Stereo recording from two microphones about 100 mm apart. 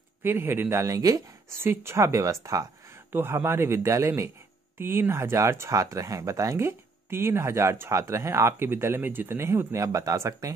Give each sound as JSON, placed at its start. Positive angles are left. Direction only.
{"t": 0.2, "sound": "speech", "side_deg": -20}